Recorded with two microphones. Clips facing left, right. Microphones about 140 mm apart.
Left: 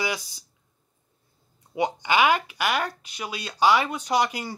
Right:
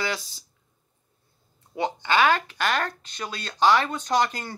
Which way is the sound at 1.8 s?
15° left (ahead or behind).